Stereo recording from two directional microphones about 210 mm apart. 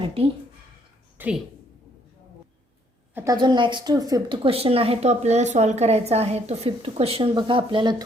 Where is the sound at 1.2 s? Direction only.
5° right (ahead or behind).